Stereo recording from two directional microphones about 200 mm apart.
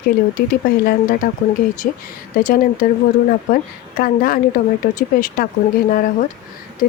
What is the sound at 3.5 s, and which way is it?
A woman's voice, 45° left (ahead or behind).